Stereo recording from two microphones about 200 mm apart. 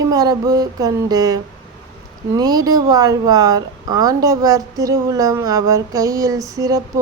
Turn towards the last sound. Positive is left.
turn(degrees=-15)  # may be behind; listen again after turning